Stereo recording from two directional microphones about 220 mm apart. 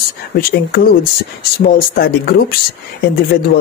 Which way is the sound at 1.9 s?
40° left (ahead or behind).